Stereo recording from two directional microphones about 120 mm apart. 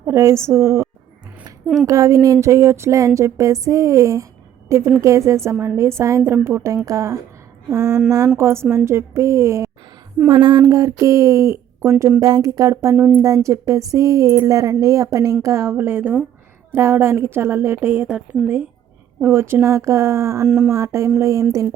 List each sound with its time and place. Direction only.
0.0 s a woman's voice: 20° right (ahead or behind)
1.6 s a woman's voice: centre (ahead or behind)
1.9 s speech: 25° right (ahead or behind)
10.2 s speech: 40° right (ahead or behind)